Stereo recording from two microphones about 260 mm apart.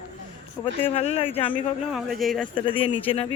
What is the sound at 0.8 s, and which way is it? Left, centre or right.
Speech, left.